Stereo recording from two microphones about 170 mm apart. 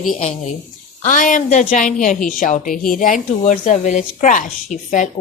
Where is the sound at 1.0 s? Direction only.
50° left (ahead or behind).